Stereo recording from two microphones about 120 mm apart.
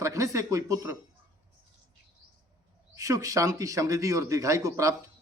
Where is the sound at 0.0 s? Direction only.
25° right (ahead or behind).